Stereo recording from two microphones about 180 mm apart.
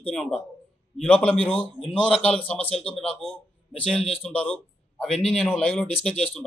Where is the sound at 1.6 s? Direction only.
30° left (ahead or behind).